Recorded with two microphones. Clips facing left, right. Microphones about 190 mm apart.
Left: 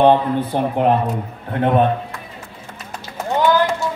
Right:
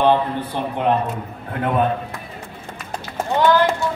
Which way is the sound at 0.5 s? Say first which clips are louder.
Left 5 dB; 50° left (ahead or behind).